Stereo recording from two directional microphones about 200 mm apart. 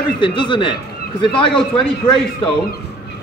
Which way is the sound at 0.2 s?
25° left (ahead or behind).